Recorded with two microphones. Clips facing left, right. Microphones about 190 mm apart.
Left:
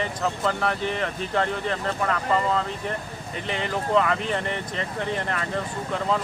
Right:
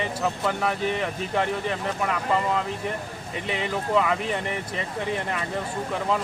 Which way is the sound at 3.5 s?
5° right (ahead or behind).